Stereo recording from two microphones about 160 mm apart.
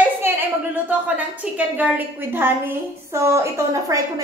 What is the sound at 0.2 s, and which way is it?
A woman's voice, 15° right (ahead or behind).